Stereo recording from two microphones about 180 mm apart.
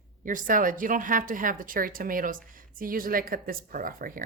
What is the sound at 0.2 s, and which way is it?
A woman's voice, 45° right (ahead or behind).